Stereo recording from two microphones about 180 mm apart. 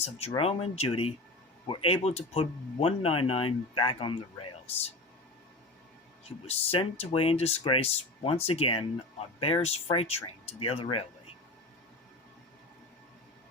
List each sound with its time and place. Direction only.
0.0 s speech: 35° left (ahead or behind)
6.2 s speech: 35° left (ahead or behind)